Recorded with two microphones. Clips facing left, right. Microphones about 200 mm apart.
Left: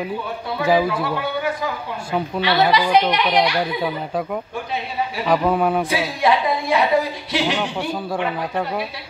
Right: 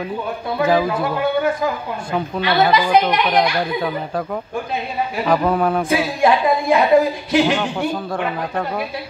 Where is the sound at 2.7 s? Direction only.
50° right (ahead or behind).